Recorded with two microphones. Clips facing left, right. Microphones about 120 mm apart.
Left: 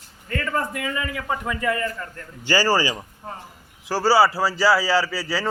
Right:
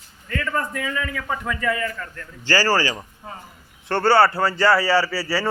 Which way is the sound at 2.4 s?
15° left (ahead or behind).